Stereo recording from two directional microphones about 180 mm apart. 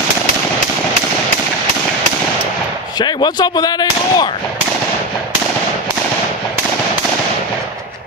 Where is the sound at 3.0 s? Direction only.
25° left (ahead or behind).